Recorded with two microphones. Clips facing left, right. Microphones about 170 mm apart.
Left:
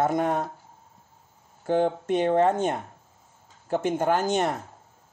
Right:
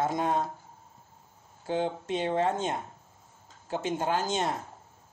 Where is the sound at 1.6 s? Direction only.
55° left (ahead or behind).